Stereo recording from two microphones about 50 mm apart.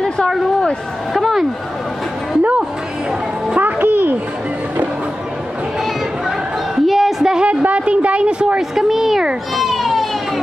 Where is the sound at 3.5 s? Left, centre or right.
Right.